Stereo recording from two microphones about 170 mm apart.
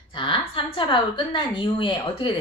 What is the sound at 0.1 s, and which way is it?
A woman's voice, 30° left (ahead or behind).